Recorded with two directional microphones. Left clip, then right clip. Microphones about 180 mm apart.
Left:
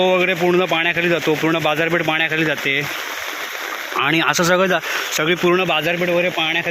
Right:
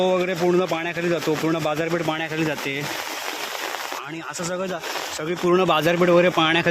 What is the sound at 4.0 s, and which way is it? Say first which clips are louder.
Speech: left 15 dB; 15° left (ahead or behind).